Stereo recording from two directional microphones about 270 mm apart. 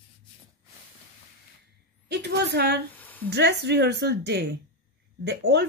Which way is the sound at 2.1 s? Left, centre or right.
Right.